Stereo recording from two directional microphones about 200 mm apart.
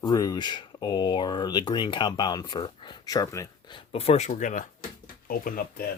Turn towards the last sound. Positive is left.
turn(degrees=45)  # may be behind; listen again after turning